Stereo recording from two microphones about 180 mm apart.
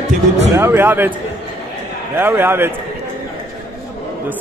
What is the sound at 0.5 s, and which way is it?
Speech, 15° right (ahead or behind).